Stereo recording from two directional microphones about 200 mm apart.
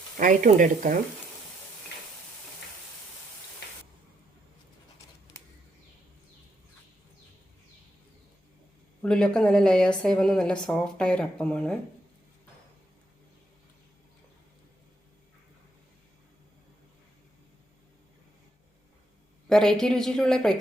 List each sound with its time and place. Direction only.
0.2 s speech: 40° right (ahead or behind)
9.0 s a woman's voice: 5° left (ahead or behind)
19.5 s a woman's voice: centre (ahead or behind)